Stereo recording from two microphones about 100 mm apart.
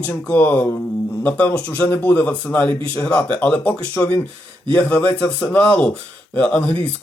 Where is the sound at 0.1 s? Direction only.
15° left (ahead or behind).